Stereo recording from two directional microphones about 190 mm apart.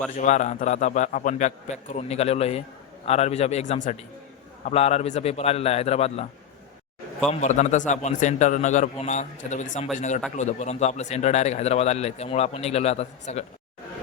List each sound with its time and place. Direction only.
0.1 s a man's voice: 40° left (ahead or behind)
7.3 s a man's voice: 40° left (ahead or behind)